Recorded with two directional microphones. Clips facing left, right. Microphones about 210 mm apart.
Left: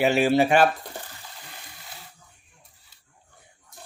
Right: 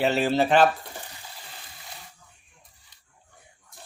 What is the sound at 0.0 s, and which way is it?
Speech, 10° left (ahead or behind).